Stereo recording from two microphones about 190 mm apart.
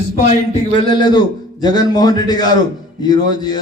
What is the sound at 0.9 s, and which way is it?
A man's voice, 25° left (ahead or behind).